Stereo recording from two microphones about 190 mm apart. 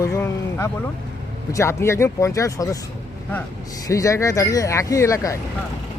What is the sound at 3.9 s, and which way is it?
Speech, 15° left (ahead or behind).